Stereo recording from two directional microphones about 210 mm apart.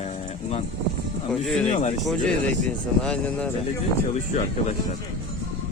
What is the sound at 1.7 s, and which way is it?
Speech, 30° left (ahead or behind).